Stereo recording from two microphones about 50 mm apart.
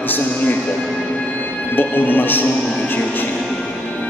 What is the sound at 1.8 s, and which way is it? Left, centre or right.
Speech, left.